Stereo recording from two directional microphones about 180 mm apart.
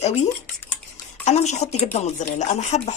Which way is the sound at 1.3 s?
40° left (ahead or behind).